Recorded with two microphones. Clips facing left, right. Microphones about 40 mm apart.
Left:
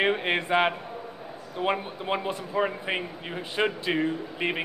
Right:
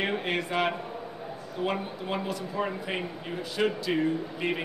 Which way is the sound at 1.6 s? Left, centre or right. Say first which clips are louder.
Left 3 dB; left.